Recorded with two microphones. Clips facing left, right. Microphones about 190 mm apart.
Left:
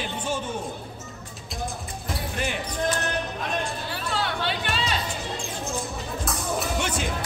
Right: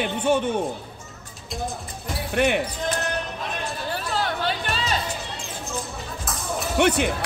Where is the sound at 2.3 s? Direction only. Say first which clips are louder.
Right 11 dB; 65° right (ahead or behind).